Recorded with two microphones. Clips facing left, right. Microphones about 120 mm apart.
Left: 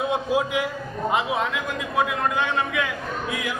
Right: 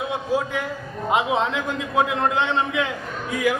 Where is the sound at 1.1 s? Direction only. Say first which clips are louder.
Right 4 dB; 25° right (ahead or behind).